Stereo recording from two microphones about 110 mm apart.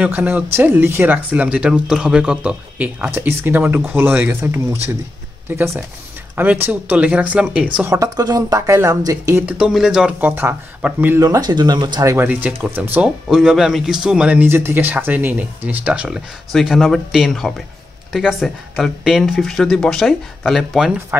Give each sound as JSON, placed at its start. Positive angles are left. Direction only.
{"t": 0.0, "sound": "speech", "side_deg": -15}
{"t": 7.9, "sound": "speech", "side_deg": -35}
{"t": 9.5, "sound": "speech", "side_deg": -5}
{"t": 10.2, "sound": "speech", "side_deg": -20}
{"t": 11.1, "sound": "speech", "side_deg": -35}
{"t": 12.0, "sound": "speech", "side_deg": -30}
{"t": 12.3, "sound": "speech", "side_deg": -15}
{"t": 13.3, "sound": "speech", "side_deg": -5}
{"t": 21.1, "sound": "speech", "side_deg": -20}